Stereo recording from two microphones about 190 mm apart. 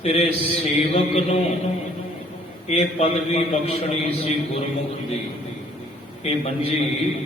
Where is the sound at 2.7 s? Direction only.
35° left (ahead or behind).